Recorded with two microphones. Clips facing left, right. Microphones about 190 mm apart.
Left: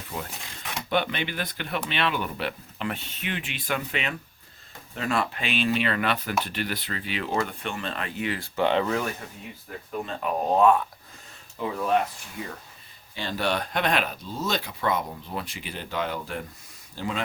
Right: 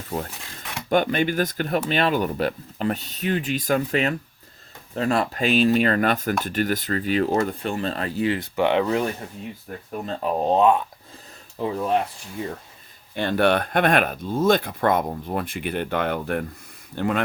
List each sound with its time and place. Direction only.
0.9 s speech: 45° right (ahead or behind)
8.4 s speech: 15° right (ahead or behind)
10.1 s speech: 30° right (ahead or behind)
11.6 s speech: 35° right (ahead or behind)
13.1 s speech: 55° right (ahead or behind)